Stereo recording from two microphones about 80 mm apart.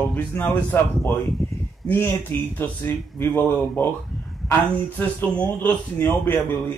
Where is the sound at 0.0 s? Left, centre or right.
Left.